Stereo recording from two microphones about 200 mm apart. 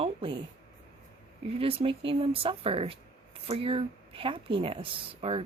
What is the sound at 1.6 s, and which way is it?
Speech, 30° right (ahead or behind).